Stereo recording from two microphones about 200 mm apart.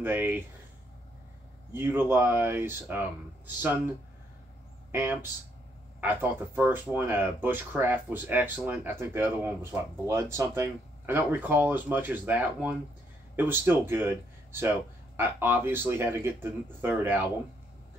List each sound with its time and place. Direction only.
0.0 s speech: 10° right (ahead or behind)
1.7 s speech: 10° right (ahead or behind)
4.9 s speech: 10° right (ahead or behind)